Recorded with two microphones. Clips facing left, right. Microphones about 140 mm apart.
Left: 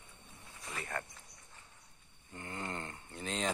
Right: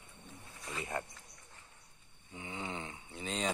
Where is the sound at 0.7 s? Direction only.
20° right (ahead or behind).